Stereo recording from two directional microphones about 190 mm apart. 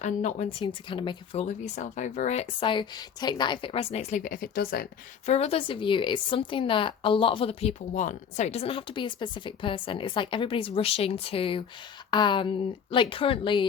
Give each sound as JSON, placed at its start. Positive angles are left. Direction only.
{"t": 0.0, "sound": "speech", "side_deg": 40}
{"t": 5.2, "sound": "speech", "side_deg": 35}